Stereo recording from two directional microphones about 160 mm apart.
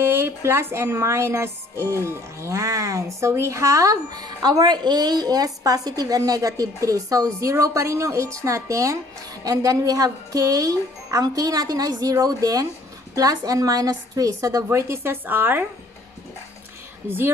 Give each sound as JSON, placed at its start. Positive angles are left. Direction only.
{"t": 0.0, "sound": "speech", "side_deg": -15}
{"t": 17.0, "sound": "speech", "side_deg": -15}